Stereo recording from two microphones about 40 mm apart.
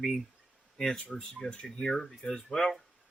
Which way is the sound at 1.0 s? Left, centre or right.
Left.